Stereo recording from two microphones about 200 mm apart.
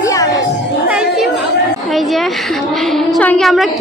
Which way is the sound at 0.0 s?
15° left (ahead or behind).